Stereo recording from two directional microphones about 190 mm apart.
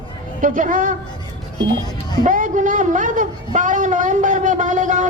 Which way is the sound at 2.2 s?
45° right (ahead or behind).